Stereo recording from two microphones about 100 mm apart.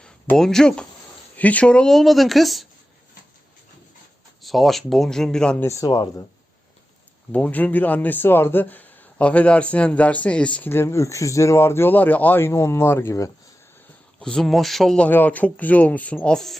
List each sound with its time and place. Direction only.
0.0 s speech: 5° left (ahead or behind)
4.4 s speech: centre (ahead or behind)
5.5 s speech: 30° left (ahead or behind)
7.3 s speech: 15° left (ahead or behind)
14.2 s speech: 5° left (ahead or behind)